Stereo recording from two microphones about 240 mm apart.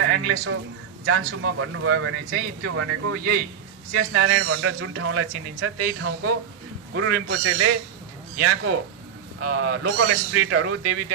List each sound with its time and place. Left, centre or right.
0.0 s a man's voice: right
3.9 s speech: right